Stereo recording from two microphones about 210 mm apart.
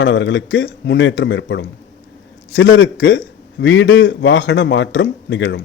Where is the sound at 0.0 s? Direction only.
60° left (ahead or behind).